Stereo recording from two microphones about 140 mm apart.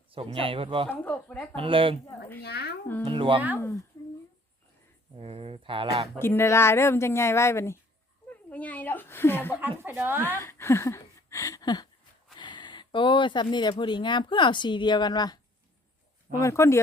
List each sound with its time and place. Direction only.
0.1 s speech: 40° right (ahead or behind)
0.9 s speech: 10° left (ahead or behind)
1.5 s speech: 40° right (ahead or behind)
3.0 s speech: 40° right (ahead or behind)
5.1 s speech: 40° right (ahead or behind)
6.1 s a woman's voice: 15° left (ahead or behind)
9.6 s speech: 15° right (ahead or behind)
10.2 s speech: 15° left (ahead or behind)
16.4 s a woman's voice: 20° left (ahead or behind)